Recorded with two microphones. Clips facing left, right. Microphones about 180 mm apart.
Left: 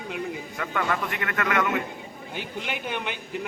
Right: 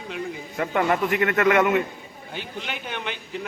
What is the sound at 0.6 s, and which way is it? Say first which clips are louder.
A man's voice: right 6 dB; 30° right (ahead or behind).